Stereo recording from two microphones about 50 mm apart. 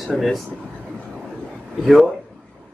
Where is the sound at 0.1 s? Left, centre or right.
Centre.